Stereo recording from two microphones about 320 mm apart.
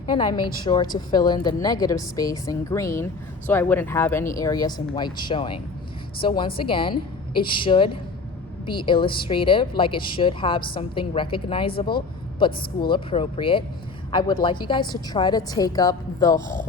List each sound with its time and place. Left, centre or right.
0.1 s a woman's voice: centre
11.7 s speech: left
12.9 s a woman's voice: centre